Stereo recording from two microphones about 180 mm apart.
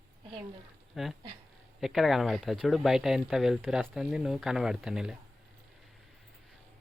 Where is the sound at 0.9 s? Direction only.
Centre (ahead or behind).